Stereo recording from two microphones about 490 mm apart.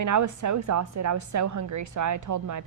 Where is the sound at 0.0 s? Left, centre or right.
Right.